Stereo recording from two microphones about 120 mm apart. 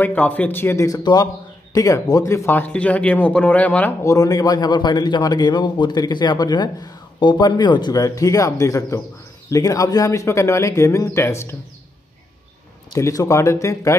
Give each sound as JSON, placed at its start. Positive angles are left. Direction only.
{"t": 0.0, "sound": "a man's voice", "side_deg": 15}
{"t": 4.0, "sound": "a man's voice", "side_deg": 30}
{"t": 12.9, "sound": "speech", "side_deg": 30}